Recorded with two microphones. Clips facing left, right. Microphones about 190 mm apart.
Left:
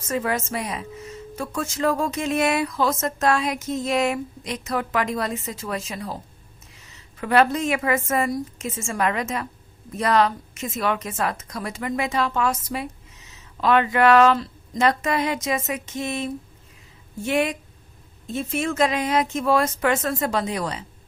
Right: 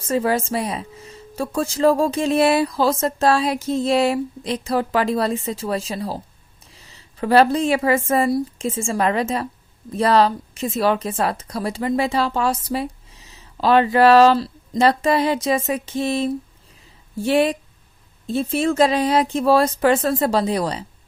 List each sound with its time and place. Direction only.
0.0 s a woman's voice: 30° right (ahead or behind)